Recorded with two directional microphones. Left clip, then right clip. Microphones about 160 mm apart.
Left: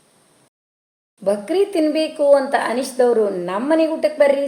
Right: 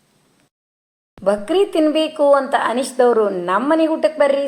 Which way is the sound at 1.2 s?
10° right (ahead or behind).